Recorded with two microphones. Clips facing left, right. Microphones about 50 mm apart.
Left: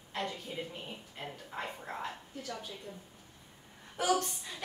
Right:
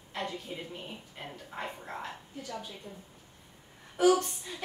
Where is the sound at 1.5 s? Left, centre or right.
Centre.